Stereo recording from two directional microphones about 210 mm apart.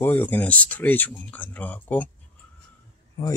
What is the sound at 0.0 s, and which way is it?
Speech, 10° left (ahead or behind).